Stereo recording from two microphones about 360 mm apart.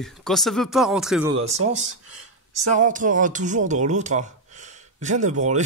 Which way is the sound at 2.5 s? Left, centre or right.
Centre.